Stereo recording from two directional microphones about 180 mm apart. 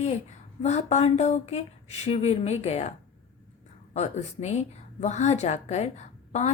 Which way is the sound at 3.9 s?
40° left (ahead or behind).